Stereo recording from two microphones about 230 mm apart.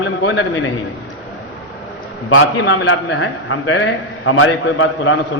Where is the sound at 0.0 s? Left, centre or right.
Left.